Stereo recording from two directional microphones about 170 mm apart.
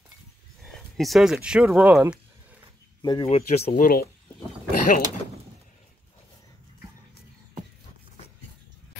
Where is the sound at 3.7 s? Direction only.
60° left (ahead or behind).